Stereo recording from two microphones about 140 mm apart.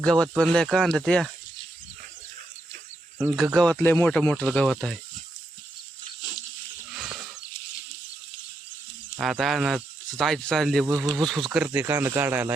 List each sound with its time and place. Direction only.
0.0 s speech: 5° left (ahead or behind)
3.2 s speech: 5° right (ahead or behind)
6.9 s wild animals: 5° right (ahead or behind)
9.1 s speech: 5° right (ahead or behind)